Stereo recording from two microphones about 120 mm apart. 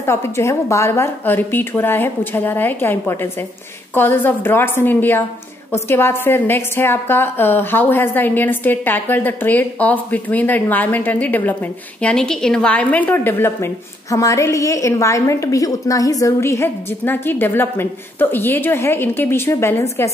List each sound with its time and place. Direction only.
0.0 s a woman's voice: 20° left (ahead or behind)